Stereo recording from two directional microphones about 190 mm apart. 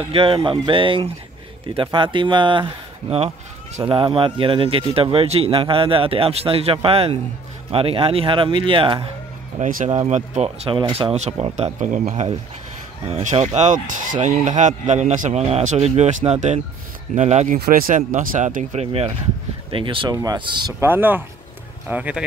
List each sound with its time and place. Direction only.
0.1 s speech: 30° right (ahead or behind)
9.6 s a man's voice: 45° right (ahead or behind)
17.6 s a man's voice: 50° right (ahead or behind); by 20.7 s 20° right (ahead or behind)
20.8 s speech: 10° right (ahead or behind)